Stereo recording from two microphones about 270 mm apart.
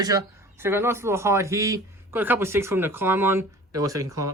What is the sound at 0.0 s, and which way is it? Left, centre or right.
Speech, centre.